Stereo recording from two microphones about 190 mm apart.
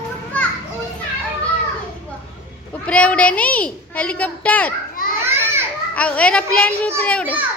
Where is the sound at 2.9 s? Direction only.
5° left (ahead or behind).